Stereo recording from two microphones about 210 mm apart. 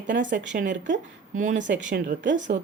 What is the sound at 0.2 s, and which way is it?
Speech, 40° right (ahead or behind).